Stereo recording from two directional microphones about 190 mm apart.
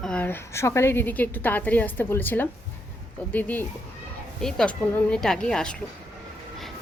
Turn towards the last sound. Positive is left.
turn(degrees=5)  # may be behind; listen again after turning